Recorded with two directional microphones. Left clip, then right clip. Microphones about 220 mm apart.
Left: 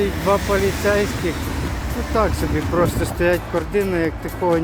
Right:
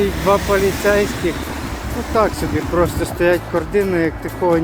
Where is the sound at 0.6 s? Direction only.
45° right (ahead or behind).